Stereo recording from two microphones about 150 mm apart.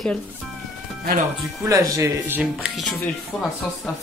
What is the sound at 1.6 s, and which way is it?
Speech, 20° right (ahead or behind).